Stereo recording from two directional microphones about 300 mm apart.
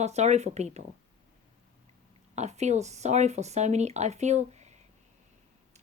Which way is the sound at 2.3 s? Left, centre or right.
Right.